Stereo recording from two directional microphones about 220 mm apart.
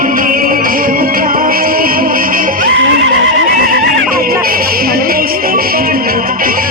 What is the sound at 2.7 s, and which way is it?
Neigh, 55° right (ahead or behind).